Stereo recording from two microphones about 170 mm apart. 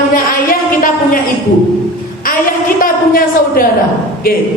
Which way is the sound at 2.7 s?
60° left (ahead or behind).